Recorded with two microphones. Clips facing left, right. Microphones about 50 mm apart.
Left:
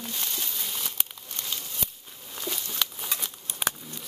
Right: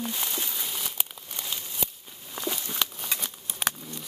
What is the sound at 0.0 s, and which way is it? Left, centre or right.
Crumpling, centre.